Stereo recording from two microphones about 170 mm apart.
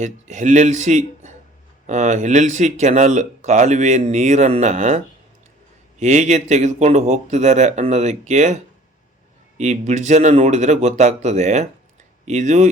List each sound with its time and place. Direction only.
0.0 s speech: 45° right (ahead or behind)